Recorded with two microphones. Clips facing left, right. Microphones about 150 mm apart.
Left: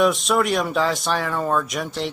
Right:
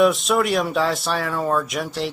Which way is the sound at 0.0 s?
Centre (ahead or behind).